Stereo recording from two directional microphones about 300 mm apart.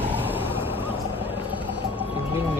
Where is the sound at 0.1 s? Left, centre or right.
Centre.